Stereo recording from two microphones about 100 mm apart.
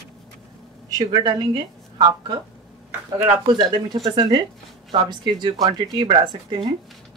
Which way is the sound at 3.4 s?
50° right (ahead or behind).